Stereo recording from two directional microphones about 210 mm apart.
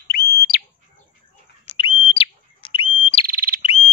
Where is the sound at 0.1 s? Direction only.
45° left (ahead or behind).